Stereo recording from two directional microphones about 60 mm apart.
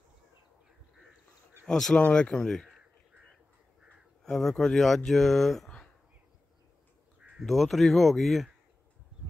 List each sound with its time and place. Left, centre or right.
1.7 s speech: centre
4.2 s speech: centre
7.2 s crow: centre
7.4 s speech: centre